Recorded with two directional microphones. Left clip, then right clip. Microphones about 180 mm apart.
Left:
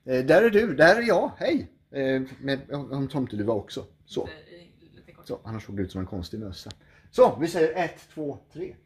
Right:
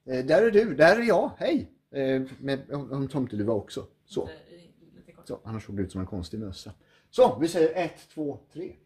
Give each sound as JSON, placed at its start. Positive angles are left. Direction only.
{"t": 0.0, "sound": "speech", "side_deg": 50}
{"t": 0.9, "sound": "speech", "side_deg": 0}
{"t": 5.2, "sound": "speech", "side_deg": 10}
{"t": 7.2, "sound": "speech", "side_deg": 20}